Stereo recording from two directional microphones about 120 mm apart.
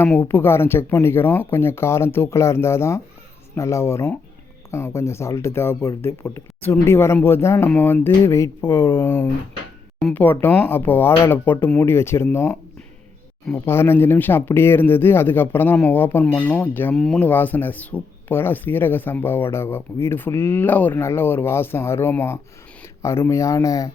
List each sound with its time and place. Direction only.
0.0 s speech: 15° left (ahead or behind)
16.9 s speech: 5° left (ahead or behind)
17.2 s speech: 15° left (ahead or behind)